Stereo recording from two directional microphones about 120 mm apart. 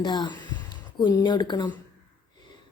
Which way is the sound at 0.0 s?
35° left (ahead or behind).